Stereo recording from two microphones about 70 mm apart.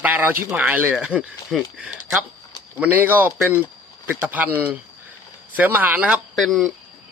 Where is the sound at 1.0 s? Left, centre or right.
Centre.